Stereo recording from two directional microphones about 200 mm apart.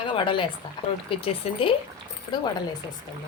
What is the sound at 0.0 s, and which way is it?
Speech, 25° left (ahead or behind).